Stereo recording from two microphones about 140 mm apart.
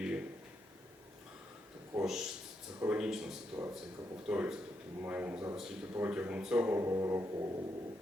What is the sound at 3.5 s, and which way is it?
A man's voice, 15° right (ahead or behind).